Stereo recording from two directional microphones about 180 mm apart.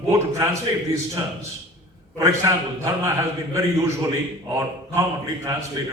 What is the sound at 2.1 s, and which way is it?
A man's voice, 15° right (ahead or behind).